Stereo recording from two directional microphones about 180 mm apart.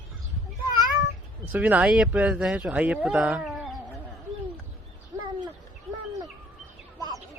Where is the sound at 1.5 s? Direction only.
5° right (ahead or behind).